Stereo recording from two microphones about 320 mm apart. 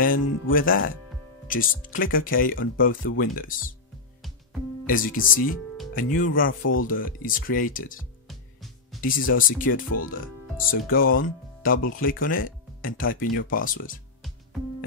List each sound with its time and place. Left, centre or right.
0.0 s speech: left
4.8 s speech: left
6.8 s speech: left
8.3 s music: centre
9.0 s speech: left